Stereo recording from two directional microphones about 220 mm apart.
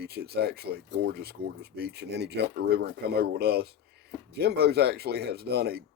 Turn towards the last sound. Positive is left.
turn(degrees=-45)  # may be behind; listen again after turning